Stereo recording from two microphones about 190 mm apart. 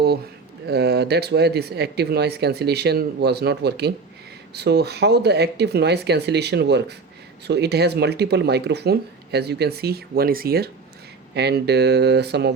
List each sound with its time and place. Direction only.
0.7 s speech: 60° right (ahead or behind)